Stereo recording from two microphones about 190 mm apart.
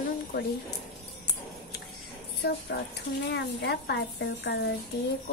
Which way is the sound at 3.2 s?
60° left (ahead or behind).